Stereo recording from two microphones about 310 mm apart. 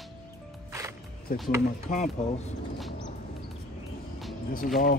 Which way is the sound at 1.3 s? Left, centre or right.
Left.